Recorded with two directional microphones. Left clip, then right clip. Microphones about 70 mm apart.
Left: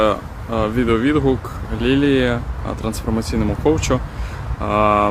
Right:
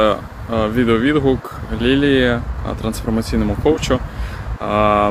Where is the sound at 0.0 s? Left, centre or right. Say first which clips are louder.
Right 2 dB; left.